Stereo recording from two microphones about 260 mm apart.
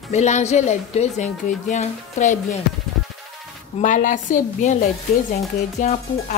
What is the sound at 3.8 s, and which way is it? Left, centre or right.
Speech, left.